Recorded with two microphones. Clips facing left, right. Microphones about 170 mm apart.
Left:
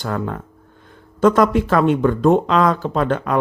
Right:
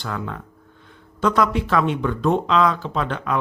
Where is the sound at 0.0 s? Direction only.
45° left (ahead or behind).